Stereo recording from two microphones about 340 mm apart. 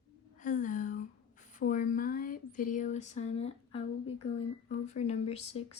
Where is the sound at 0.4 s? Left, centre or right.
Left.